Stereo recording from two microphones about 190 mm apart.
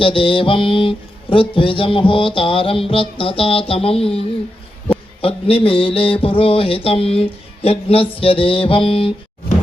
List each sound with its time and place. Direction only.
0.0 s speech: 25° left (ahead or behind)